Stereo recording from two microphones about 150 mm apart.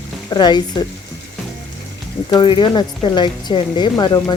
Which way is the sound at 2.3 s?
30° left (ahead or behind).